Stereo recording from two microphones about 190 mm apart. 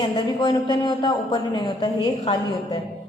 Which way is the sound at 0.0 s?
25° left (ahead or behind).